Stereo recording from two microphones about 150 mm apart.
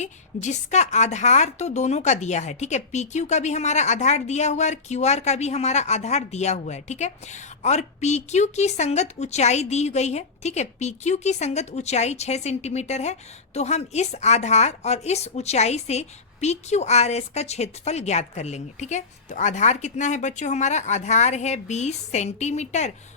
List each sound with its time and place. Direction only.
0.0 s a woman's voice: 50° left (ahead or behind)